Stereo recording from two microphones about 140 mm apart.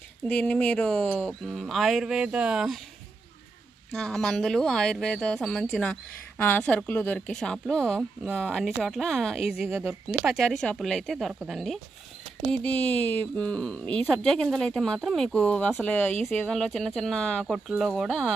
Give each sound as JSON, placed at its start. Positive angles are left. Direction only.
{"t": 0.3, "sound": "speech", "side_deg": 10}
{"t": 3.9, "sound": "speech", "side_deg": 5}
{"t": 9.6, "sound": "speech", "side_deg": -15}
{"t": 10.2, "sound": "speech", "side_deg": 0}
{"t": 12.5, "sound": "speech", "side_deg": 10}